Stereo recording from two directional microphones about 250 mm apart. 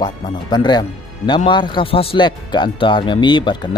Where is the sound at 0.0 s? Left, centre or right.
Centre.